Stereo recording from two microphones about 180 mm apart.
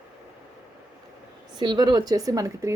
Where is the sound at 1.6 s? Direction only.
25° right (ahead or behind).